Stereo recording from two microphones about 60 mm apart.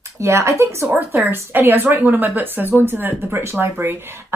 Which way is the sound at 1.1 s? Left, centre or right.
Right.